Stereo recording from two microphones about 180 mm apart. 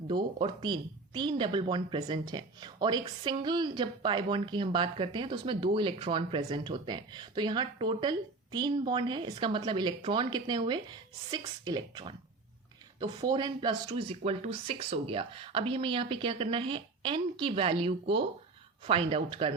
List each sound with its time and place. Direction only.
0.1 s a woman's voice: 25° right (ahead or behind)